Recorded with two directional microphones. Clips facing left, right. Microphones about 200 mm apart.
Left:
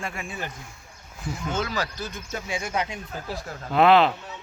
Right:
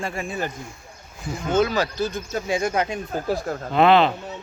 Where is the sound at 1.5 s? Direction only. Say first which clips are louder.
Right 11 dB; 20° right (ahead or behind); by 3.6 s 50° right (ahead or behind).